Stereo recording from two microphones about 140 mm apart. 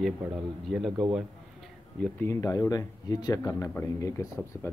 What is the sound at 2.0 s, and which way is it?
Speech, 15° left (ahead or behind).